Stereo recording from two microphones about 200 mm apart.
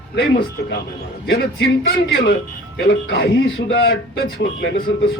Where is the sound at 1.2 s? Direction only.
65° left (ahead or behind).